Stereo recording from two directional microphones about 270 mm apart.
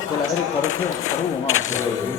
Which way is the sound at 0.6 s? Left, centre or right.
Left.